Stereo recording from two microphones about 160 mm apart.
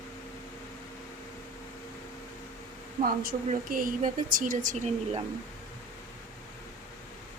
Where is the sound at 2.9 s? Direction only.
65° right (ahead or behind); by 5.2 s 45° right (ahead or behind).